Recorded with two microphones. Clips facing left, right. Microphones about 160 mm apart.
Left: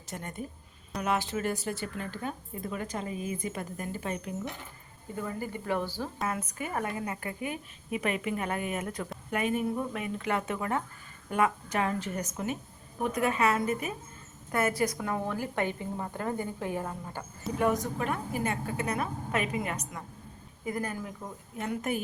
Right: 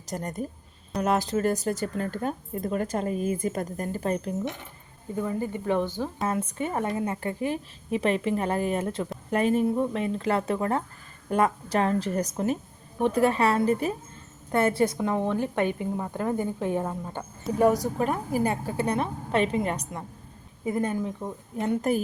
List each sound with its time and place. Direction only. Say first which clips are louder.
0.0 s a woman's voice: right 7 dB; 40° right (ahead or behind)
5.1 s a woman's voice: right 6 dB; 20° right (ahead or behind)
17.6 s a woman's voice: right 6 dB; 35° right (ahead or behind)